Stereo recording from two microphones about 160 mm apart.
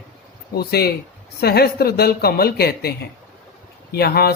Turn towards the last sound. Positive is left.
turn(degrees=80)